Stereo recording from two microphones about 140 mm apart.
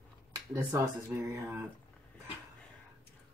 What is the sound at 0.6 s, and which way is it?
Speech, 20° right (ahead or behind).